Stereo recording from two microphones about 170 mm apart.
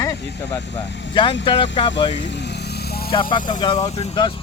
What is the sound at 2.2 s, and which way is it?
Vehicle, 90° left.